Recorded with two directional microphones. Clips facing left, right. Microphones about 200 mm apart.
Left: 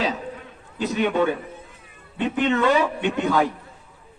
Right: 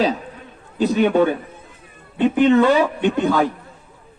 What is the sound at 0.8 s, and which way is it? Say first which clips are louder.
A man's voice: right 6 dB; 35° right (ahead or behind).